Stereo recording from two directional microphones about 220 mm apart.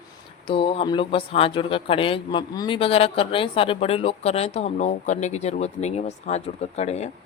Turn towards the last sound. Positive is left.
turn(degrees=30)  # may be behind; listen again after turning